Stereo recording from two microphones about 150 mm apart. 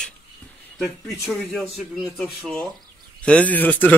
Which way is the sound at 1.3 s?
5° left (ahead or behind).